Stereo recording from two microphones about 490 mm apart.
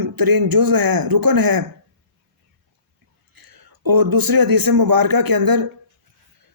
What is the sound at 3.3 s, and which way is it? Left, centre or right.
A man's voice, right.